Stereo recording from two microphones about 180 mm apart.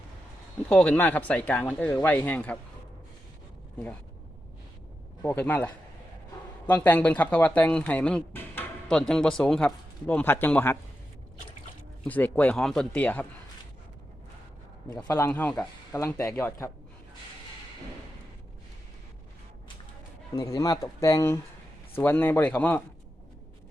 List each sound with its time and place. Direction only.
0.7 s speech: 5° left (ahead or behind)
5.2 s speech: 10° left (ahead or behind)
12.0 s speech: 10° left (ahead or behind)
15.0 s speech: 10° left (ahead or behind)
20.3 s speech: 20° left (ahead or behind)